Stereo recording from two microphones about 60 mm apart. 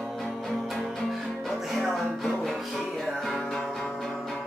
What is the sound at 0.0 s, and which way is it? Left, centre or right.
Music, centre.